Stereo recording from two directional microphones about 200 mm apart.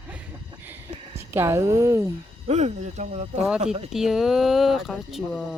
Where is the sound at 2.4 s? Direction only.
35° right (ahead or behind).